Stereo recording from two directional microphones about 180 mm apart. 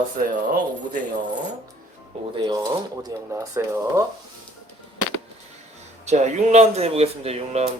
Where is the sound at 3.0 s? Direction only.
15° right (ahead or behind).